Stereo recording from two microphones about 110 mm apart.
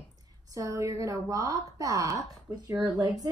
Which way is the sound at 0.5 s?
30° right (ahead or behind).